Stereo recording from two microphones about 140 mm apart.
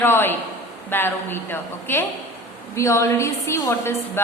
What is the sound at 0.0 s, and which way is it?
A woman's voice, 15° left (ahead or behind).